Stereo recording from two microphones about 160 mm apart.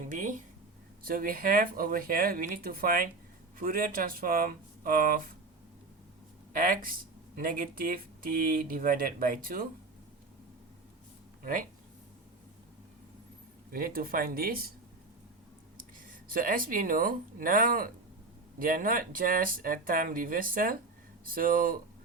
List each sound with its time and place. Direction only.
0.1 s speech: 55° right (ahead or behind)
6.5 s speech: 60° right (ahead or behind)
13.7 s speech: 65° right (ahead or behind)
15.8 s speech: 60° right (ahead or behind)